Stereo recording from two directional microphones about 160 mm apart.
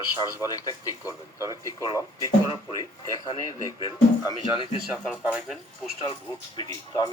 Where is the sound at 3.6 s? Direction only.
25° left (ahead or behind).